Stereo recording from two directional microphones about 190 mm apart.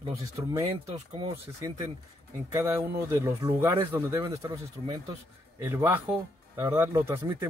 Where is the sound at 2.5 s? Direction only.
15° right (ahead or behind).